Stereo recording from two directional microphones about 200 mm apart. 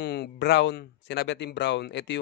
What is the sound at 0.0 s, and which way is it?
Speech, 55° left (ahead or behind).